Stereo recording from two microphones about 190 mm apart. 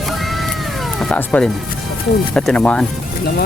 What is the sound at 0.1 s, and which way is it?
Cat, centre (ahead or behind).